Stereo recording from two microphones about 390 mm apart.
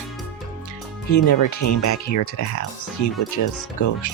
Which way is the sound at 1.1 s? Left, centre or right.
Left.